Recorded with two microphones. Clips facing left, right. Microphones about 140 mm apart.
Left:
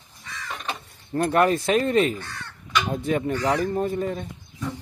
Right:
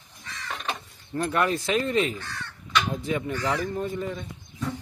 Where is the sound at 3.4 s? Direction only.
30° left (ahead or behind).